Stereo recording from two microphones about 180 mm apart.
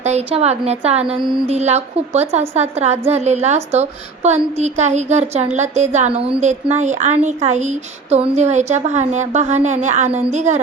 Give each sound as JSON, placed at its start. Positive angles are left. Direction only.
{"t": 0.0, "sound": "a woman's voice", "side_deg": -35}